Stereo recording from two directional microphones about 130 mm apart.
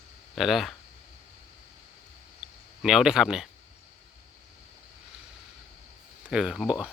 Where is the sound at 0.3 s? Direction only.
Centre (ahead or behind).